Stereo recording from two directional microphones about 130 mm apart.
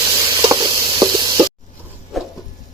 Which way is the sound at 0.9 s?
35° right (ahead or behind).